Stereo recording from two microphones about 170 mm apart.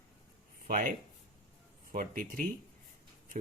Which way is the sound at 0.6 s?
50° right (ahead or behind).